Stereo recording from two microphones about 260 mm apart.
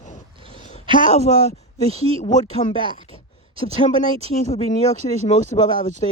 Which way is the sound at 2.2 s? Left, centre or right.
Left.